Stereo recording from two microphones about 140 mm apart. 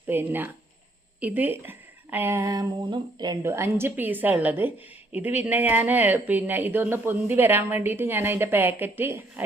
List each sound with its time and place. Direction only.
0.1 s speech: 15° right (ahead or behind)